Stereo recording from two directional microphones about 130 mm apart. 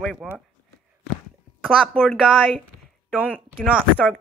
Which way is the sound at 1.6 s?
5° left (ahead or behind).